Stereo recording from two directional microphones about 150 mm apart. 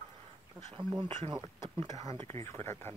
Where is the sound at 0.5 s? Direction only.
30° right (ahead or behind).